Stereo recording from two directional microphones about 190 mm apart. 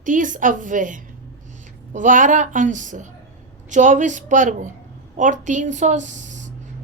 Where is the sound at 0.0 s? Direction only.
45° right (ahead or behind).